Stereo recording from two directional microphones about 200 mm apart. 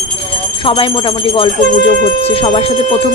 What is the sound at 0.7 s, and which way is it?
Speech, 25° left (ahead or behind).